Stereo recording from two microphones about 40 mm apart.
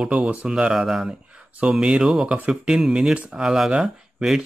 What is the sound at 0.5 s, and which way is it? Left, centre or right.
Speech, right.